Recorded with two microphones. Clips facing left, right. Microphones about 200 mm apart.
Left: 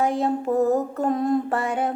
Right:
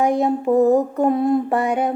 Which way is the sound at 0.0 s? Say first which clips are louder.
Right 4 dB; 15° right (ahead or behind).